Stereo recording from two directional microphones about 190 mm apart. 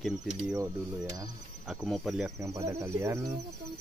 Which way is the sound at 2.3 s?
15° right (ahead or behind).